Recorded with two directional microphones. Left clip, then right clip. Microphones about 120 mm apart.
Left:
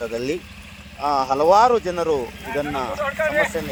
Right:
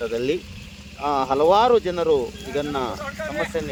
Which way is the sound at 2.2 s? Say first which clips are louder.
Left 1 dB; 15° left (ahead or behind).